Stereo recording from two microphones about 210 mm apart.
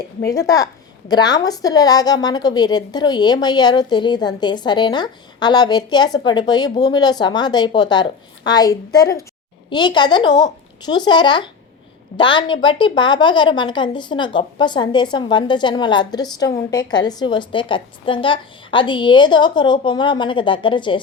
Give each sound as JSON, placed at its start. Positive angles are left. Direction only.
{"t": 0.2, "sound": "a woman's voice", "side_deg": 15}